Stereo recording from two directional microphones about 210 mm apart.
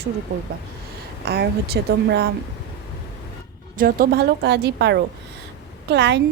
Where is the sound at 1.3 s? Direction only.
50° right (ahead or behind).